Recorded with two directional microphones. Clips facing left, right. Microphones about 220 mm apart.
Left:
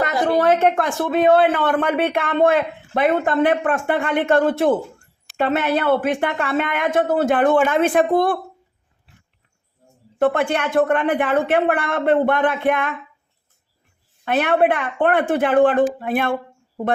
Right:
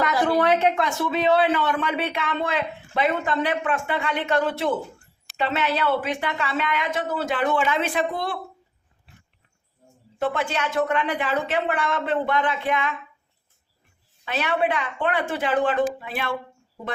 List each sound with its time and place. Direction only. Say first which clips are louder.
0.3 s speech: left 6 dB; 50° left (ahead or behind)
10.2 s speech: left 7 dB; 55° left (ahead or behind)
14.3 s speech: left 7 dB; 55° left (ahead or behind)